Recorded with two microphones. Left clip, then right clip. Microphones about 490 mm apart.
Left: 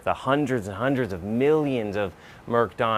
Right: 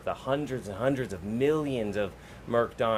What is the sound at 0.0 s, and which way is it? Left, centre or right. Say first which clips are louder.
Speech: left 7 dB; left.